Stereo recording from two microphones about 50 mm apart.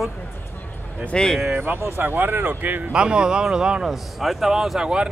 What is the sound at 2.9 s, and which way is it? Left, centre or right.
Speech, centre.